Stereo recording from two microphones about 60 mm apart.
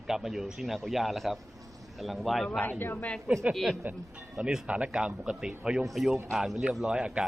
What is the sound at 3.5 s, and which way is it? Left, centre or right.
Speech, centre.